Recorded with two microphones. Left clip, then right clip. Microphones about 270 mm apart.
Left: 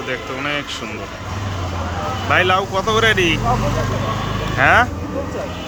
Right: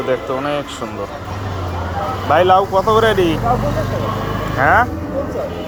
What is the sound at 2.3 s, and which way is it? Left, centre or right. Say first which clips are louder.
Speech: right 4 dB; left.